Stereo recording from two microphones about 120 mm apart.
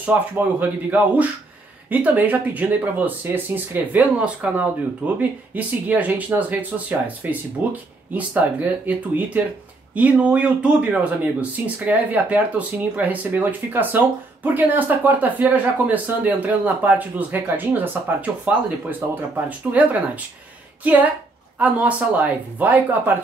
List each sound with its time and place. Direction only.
0.1 s speech: 15° right (ahead or behind)